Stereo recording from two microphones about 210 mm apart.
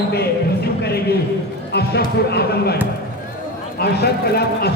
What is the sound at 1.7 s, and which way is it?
Speech, 50° left (ahead or behind).